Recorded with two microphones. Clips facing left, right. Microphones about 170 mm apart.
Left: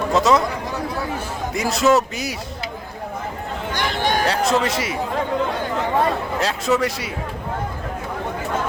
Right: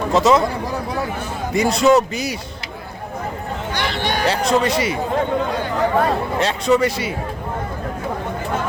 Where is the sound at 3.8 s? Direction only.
45° left (ahead or behind).